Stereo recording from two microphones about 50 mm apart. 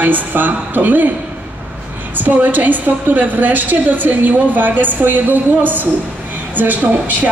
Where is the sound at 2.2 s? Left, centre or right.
Right.